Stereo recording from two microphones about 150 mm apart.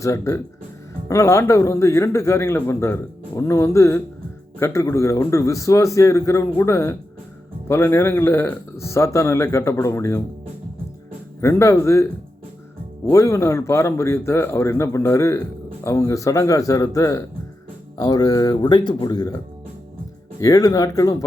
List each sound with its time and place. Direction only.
0.0 s a man's voice: 20° left (ahead or behind)
11.3 s a man's voice: 20° left (ahead or behind)
13.1 s a man's voice: 20° left (ahead or behind)
20.4 s a man's voice: 25° left (ahead or behind)